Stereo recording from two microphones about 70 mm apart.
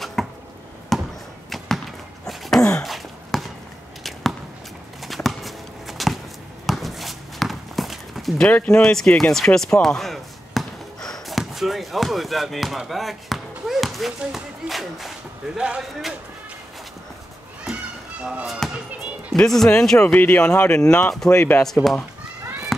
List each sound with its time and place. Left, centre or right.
0.0 s a sound: centre
0.9 s basketball bounce: centre
1.5 s a sound: centre
5.0 s clip-clop: centre
6.6 s a sound: centre
8.4 s speech: centre
18.2 s speech: centre
19.3 s speech: centre
20.1 s speech: left
21.4 s speech: left
21.6 s speech: centre
22.7 s run: centre